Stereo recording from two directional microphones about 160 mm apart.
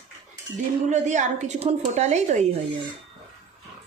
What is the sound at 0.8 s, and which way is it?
A woman's voice, 50° right (ahead or behind).